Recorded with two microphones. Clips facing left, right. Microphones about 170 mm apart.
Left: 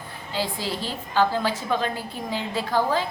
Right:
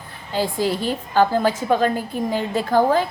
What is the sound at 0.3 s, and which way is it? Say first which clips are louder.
A woman's voice: right 7 dB; 50° right (ahead or behind).